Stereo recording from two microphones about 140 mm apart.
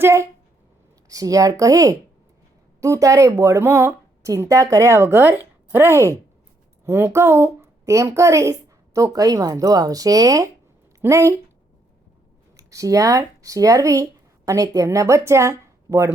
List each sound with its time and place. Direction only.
0.0 s a woman's voice: 20° right (ahead or behind)
12.5 s speech: 25° right (ahead or behind)